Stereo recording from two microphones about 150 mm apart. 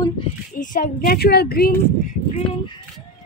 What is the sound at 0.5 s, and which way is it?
A woman's voice, 65° left (ahead or behind).